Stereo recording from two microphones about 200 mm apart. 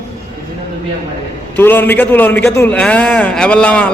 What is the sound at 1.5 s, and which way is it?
A man's voice, 10° left (ahead or behind).